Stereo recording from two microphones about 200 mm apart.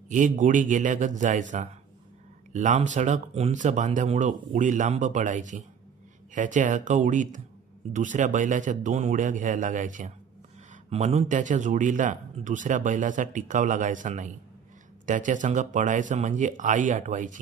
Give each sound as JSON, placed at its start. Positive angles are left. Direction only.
{"t": 0.1, "sound": "speech", "side_deg": -40}